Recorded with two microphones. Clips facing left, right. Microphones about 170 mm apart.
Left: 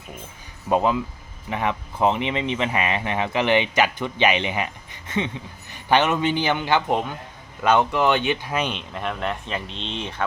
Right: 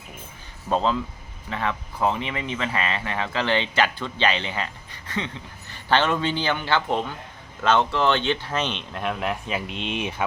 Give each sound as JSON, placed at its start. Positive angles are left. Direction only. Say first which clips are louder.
{"t": 0.7, "sound": "speech", "louder": "left 3 dB", "side_deg": 15}